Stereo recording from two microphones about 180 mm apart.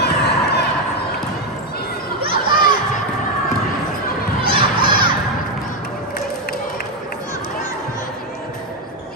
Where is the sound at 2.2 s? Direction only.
25° right (ahead or behind).